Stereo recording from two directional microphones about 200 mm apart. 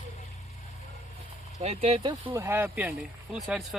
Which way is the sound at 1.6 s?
30° right (ahead or behind).